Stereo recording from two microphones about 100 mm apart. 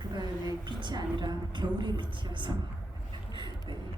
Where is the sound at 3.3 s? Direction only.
50° right (ahead or behind).